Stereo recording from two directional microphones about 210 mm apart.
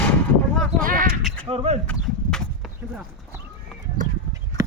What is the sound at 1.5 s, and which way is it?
Speech, 30° right (ahead or behind).